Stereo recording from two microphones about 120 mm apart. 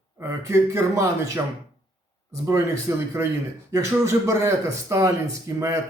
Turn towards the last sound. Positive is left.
turn(degrees=-25)  # may be behind; listen again after turning